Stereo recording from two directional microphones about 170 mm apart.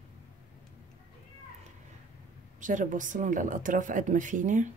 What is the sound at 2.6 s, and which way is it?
A woman's voice, 50° right (ahead or behind).